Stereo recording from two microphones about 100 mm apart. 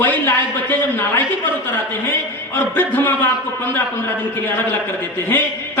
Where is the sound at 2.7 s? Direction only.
20° left (ahead or behind).